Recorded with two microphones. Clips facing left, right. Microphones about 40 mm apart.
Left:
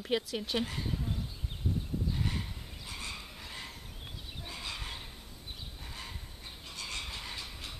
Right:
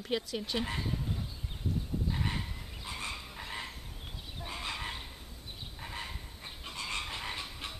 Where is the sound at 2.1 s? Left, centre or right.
Right.